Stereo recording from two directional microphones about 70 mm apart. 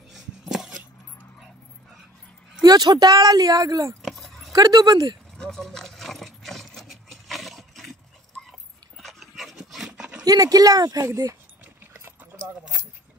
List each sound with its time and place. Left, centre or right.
0.1 s a sound: centre
2.6 s speech: right
4.0 s keys jangling: centre
4.5 s speech: right
5.4 s keys jangling: centre
8.5 s dog: centre
9.8 s dog: centre
10.2 s speech: right